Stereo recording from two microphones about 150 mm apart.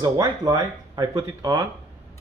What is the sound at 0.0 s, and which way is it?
Speech, 25° right (ahead or behind).